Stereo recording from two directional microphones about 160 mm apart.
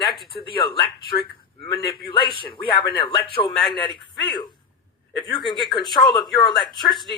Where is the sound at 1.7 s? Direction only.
25° left (ahead or behind).